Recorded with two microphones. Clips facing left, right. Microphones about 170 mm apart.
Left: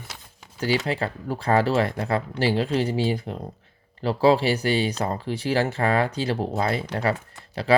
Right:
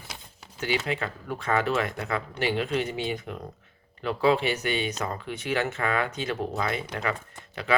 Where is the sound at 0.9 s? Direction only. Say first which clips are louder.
Left 4 dB; 35° left (ahead or behind).